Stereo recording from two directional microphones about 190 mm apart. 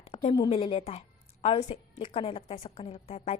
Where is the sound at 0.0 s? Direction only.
30° left (ahead or behind).